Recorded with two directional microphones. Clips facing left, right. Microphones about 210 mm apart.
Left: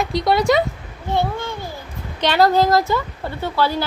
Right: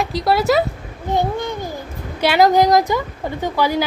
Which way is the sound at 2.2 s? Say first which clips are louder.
Right 2 dB; 10° right (ahead or behind).